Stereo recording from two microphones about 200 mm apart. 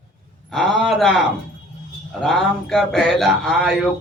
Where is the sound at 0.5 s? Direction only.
Centre (ahead or behind).